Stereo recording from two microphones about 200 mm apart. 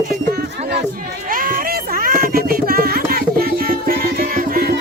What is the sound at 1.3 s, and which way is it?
Music, 45° right (ahead or behind).